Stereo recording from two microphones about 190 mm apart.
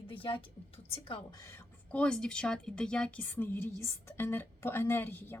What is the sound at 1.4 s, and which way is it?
A woman's voice, 10° left (ahead or behind).